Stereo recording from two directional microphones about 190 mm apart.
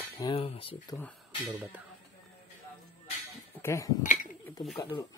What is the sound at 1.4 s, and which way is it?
Speech, 10° right (ahead or behind).